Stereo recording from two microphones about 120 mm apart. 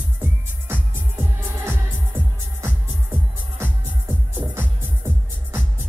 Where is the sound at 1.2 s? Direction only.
15° right (ahead or behind).